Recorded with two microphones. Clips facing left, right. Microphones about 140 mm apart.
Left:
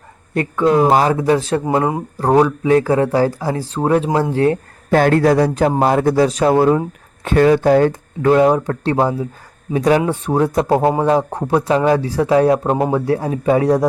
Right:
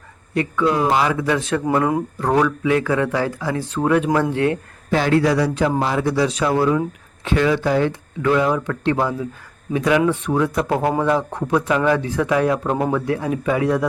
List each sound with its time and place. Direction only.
0.3 s speech: 45° left (ahead or behind)
1.6 s speech: 25° left (ahead or behind)
4.9 s speech: 50° left (ahead or behind)